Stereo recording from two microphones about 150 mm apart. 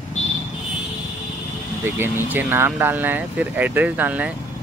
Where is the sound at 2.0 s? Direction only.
15° right (ahead or behind).